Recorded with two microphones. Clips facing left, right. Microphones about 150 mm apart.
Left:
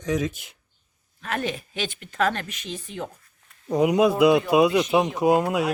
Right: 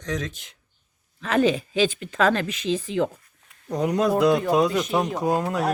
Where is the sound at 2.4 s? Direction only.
90° right.